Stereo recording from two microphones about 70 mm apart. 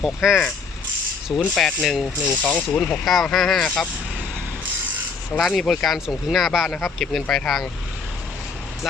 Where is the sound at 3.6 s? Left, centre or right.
Centre.